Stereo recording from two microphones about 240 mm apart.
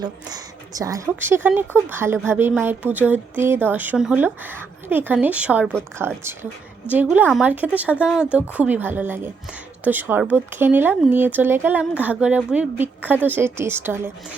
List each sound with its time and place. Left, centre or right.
0.0 s speech: centre